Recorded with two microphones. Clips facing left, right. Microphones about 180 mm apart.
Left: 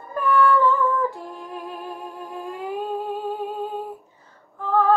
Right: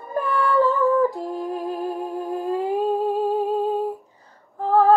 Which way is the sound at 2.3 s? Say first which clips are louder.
Right 7 dB; 35° right (ahead or behind).